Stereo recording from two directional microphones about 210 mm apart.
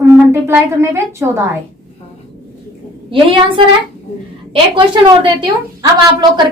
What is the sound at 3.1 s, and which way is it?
A woman's voice, 25° right (ahead or behind).